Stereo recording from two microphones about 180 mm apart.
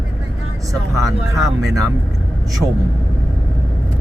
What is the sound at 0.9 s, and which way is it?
Speech, centre (ahead or behind).